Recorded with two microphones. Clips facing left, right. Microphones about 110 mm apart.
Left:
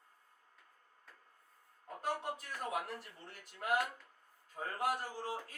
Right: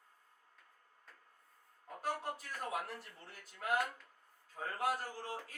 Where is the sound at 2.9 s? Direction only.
10° left (ahead or behind).